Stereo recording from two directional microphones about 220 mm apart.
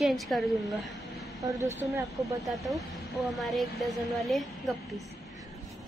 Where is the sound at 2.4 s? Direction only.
Centre (ahead or behind).